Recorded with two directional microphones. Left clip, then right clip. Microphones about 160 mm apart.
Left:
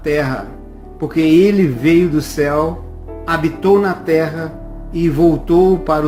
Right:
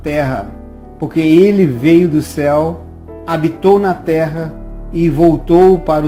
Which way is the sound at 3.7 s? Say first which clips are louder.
Right 1 dB; 40° right (ahead or behind).